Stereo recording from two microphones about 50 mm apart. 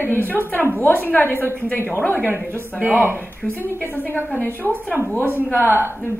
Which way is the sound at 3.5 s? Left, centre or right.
Left.